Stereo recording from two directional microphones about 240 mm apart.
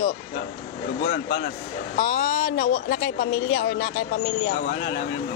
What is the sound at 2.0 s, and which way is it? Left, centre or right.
Speech, left.